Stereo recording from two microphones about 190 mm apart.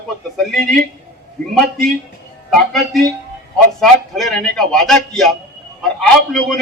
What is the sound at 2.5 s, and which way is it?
Speech, centre (ahead or behind).